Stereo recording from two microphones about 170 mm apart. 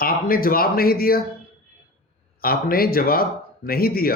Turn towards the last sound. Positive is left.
turn(degrees=60)  # may be behind; listen again after turning